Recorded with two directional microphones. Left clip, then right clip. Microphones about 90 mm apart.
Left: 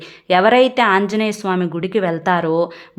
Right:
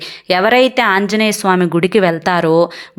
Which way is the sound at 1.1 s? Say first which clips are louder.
Right 6 dB; 30° right (ahead or behind).